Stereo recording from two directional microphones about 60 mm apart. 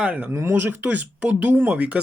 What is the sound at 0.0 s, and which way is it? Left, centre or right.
Speech, right.